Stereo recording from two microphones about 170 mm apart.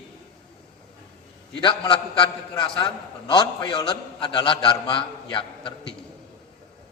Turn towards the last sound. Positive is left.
turn(degrees=30)  # may be behind; listen again after turning